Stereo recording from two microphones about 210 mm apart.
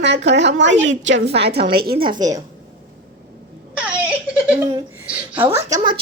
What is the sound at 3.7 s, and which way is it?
Whimper, 5° right (ahead or behind).